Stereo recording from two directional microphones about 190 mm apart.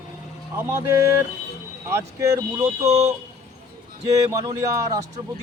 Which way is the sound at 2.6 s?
35° right (ahead or behind).